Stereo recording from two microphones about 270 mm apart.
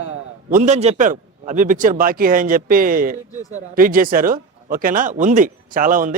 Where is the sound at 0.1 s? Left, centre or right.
Right.